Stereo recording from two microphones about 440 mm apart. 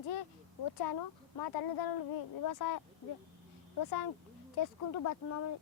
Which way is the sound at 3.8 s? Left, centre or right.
Left.